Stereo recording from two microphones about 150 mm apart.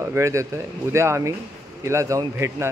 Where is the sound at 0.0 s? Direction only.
20° right (ahead or behind).